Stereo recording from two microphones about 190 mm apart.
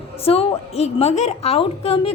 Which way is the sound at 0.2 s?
30° left (ahead or behind).